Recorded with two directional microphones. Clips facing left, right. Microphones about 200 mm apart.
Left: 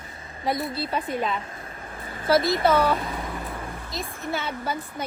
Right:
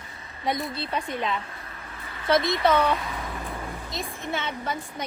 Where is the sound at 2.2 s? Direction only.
30° left (ahead or behind).